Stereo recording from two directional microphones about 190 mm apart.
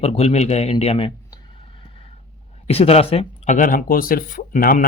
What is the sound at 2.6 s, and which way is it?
Speech, 30° left (ahead or behind).